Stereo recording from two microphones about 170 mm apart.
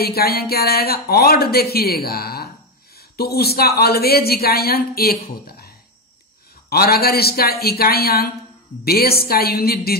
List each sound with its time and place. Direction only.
0.0 s speech: 65° left (ahead or behind)